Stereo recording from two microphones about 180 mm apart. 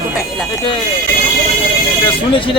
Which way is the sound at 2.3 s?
30° left (ahead or behind).